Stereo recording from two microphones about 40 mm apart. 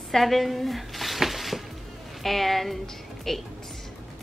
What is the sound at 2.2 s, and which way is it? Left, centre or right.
A woman's voice, centre.